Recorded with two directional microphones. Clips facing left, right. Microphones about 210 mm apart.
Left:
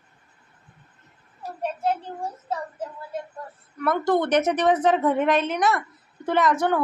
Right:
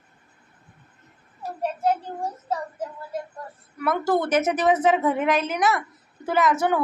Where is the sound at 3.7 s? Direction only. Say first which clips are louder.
Left 1 dB; 5° right (ahead or behind).